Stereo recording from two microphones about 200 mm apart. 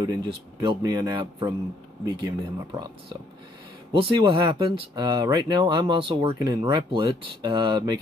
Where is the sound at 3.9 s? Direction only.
25° right (ahead or behind).